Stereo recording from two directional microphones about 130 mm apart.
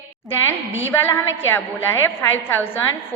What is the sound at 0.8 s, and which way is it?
A woman's voice, 15° left (ahead or behind).